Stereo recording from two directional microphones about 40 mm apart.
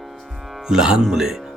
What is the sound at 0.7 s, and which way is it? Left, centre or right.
Speech, centre.